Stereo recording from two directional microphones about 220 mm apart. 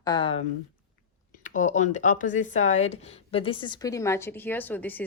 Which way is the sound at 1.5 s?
35° left (ahead or behind).